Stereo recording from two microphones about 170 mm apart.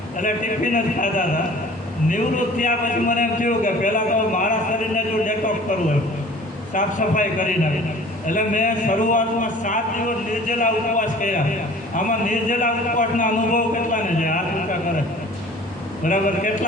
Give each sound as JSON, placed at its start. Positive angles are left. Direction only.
{"t": 0.2, "sound": "a man's voice", "side_deg": 50}
{"t": 6.7, "sound": "a man's voice", "side_deg": 50}
{"t": 16.0, "sound": "a man's voice", "side_deg": 50}